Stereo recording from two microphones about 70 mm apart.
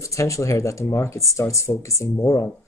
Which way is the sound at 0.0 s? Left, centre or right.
Left.